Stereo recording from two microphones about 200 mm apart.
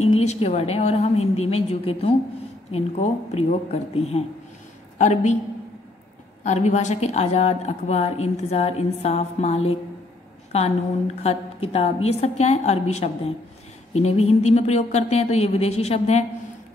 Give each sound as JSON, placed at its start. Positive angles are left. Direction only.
{"t": 0.0, "sound": "a woman's voice", "side_deg": 35}
{"t": 6.4, "sound": "a woman's voice", "side_deg": 35}